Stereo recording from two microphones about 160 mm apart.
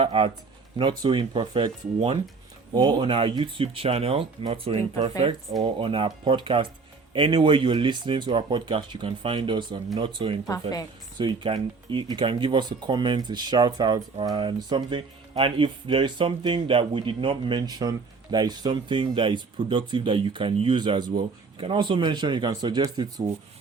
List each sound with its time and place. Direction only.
0.0 s speech: 35° right (ahead or behind)
5.5 s speech: 25° right (ahead or behind)
5.8 s speech: 35° right (ahead or behind)